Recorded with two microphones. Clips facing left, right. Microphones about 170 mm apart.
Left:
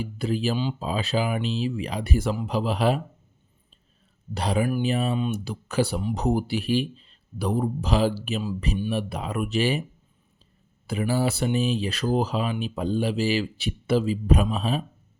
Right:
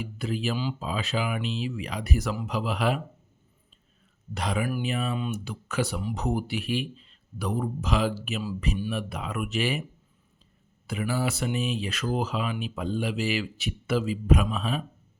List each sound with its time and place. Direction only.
0.0 s speech: 35° left (ahead or behind)
4.4 s speech: 30° left (ahead or behind)
10.8 s speech: 35° left (ahead or behind)